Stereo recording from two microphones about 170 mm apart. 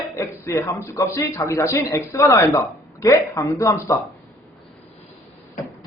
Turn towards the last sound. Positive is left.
turn(degrees=15)  # may be behind; listen again after turning